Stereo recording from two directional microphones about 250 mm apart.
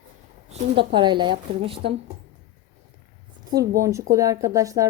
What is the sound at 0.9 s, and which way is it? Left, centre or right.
Speech, centre.